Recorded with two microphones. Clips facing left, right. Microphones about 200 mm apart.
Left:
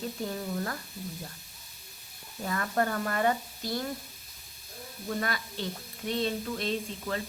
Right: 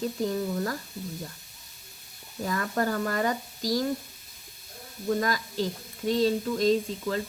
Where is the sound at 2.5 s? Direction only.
35° right (ahead or behind).